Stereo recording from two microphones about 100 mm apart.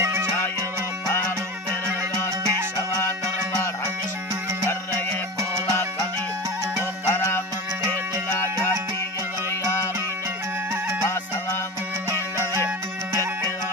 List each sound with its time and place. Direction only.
0.0 s music: 25° right (ahead or behind)
2.4 s music: 30° right (ahead or behind)
7.1 s music: 30° left (ahead or behind)
12.1 s music: 25° right (ahead or behind)